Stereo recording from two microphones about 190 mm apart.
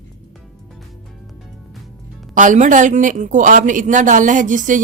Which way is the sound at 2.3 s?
40° right (ahead or behind).